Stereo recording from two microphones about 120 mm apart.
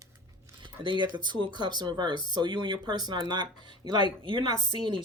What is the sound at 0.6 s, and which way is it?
Speech, 40° right (ahead or behind).